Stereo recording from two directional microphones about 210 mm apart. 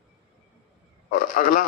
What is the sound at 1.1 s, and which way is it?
Speech, 40° left (ahead or behind).